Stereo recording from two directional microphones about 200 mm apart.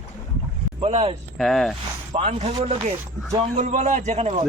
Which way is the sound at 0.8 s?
30° right (ahead or behind).